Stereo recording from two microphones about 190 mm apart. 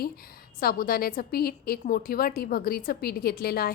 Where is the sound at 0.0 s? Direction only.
50° left (ahead or behind).